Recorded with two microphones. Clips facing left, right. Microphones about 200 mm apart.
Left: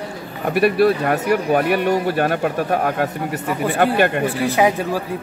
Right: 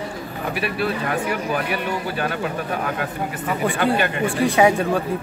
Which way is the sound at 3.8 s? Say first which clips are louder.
Left 7 dB; 55° left (ahead or behind).